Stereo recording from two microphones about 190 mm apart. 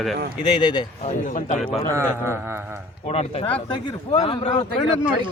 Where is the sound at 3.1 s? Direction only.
35° left (ahead or behind).